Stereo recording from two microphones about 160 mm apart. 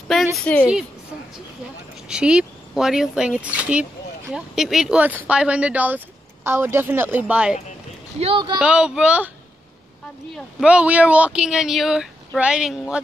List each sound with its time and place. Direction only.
0.4 s a woman's voice: 5° left (ahead or behind)
2.0 s a woman's voice: 5° right (ahead or behind)
8.2 s speech: 35° right (ahead or behind)
8.5 s a woman's voice: 5° right (ahead or behind)
10.3 s speech: 5° right (ahead or behind)